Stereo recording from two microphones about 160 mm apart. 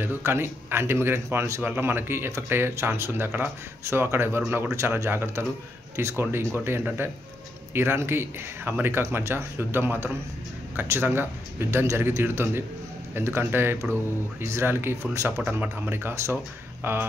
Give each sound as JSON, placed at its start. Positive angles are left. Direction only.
{"t": 0.0, "sound": "a man's voice", "side_deg": -15}